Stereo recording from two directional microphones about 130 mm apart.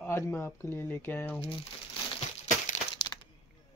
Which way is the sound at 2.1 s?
65° left (ahead or behind).